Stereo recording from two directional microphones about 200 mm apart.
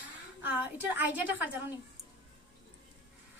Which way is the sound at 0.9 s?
10° right (ahead or behind).